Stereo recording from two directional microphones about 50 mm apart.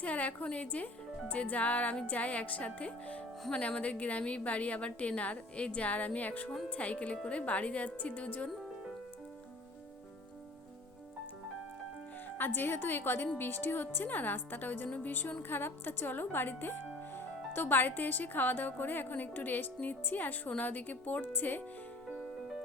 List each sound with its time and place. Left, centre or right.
0.0 s a woman's voice: left
12.4 s a woman's voice: left
14.8 s a woman's voice: left
15.1 s speech: left